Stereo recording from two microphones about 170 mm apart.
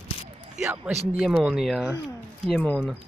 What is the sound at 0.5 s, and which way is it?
Speech, 10° right (ahead or behind).